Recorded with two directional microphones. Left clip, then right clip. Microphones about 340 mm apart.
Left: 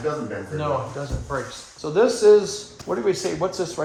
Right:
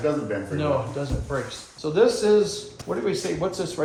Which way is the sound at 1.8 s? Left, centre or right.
Left.